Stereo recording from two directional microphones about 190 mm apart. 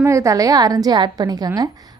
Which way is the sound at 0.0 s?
15° right (ahead or behind).